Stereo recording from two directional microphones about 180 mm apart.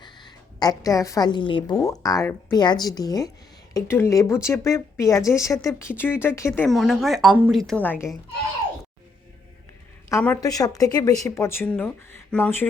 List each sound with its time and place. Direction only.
0.0 s a woman's voice: 25° left (ahead or behind)
6.7 s speech: centre (ahead or behind)
10.1 s speech: 15° left (ahead or behind)